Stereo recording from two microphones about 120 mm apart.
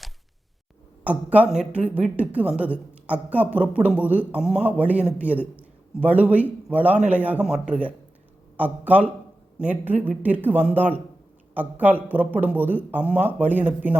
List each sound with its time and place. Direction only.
1.0 s speech: 10° right (ahead or behind)